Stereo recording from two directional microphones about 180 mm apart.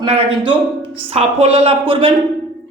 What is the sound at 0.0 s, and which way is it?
A woman's voice, 30° right (ahead or behind).